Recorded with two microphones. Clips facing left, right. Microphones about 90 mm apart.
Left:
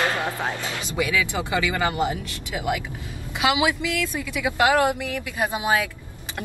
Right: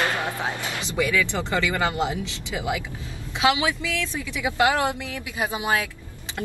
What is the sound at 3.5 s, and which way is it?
Speech, 10° left (ahead or behind).